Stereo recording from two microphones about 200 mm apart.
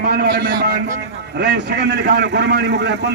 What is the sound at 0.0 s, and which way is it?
A man's voice, 50° right (ahead or behind).